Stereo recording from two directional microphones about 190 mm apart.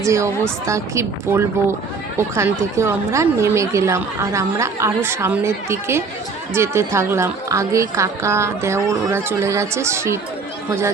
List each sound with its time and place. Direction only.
0.0 s a woman's voice: 15° right (ahead or behind)